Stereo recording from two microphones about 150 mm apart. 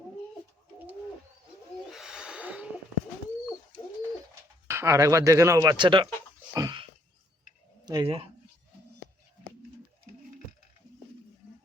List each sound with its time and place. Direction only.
1.9 s snort: 5° right (ahead or behind)
4.7 s speech: 20° right (ahead or behind)
5.7 s speech: 30° right (ahead or behind)
6.5 s a sound: 25° right (ahead or behind)
7.9 s speech: 30° right (ahead or behind)